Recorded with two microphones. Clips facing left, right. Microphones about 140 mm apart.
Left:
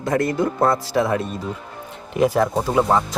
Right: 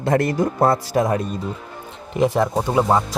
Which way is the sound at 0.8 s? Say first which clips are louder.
Right 1 dB; 40° right (ahead or behind).